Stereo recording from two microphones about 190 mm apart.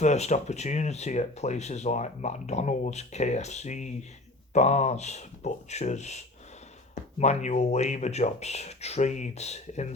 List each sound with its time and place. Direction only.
0.0 s speech: 35° left (ahead or behind)